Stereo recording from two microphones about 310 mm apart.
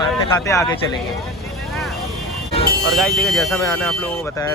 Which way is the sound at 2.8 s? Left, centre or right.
Centre.